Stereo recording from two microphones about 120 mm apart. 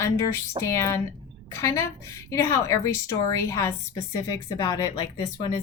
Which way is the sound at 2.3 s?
25° left (ahead or behind).